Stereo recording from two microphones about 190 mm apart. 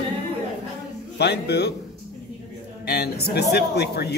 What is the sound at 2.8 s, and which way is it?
A man's voice, 60° left (ahead or behind).